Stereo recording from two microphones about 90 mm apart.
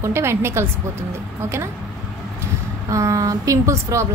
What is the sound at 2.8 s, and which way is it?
Speech, 35° right (ahead or behind).